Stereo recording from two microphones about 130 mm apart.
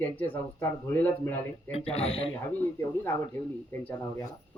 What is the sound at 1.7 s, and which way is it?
Speech, 55° left (ahead or behind).